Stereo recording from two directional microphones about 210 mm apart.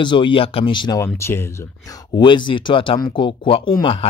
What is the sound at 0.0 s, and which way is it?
Speech, 25° left (ahead or behind).